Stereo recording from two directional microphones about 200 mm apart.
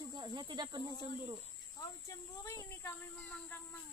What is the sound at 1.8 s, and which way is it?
Speech, 15° left (ahead or behind).